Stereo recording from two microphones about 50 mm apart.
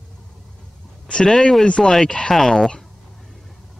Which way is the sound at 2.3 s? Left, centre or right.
Centre.